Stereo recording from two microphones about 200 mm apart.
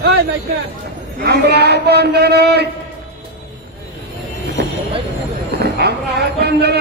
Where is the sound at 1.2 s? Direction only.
55° right (ahead or behind).